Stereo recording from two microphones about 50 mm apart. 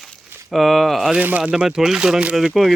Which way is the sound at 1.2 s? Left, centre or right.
Right.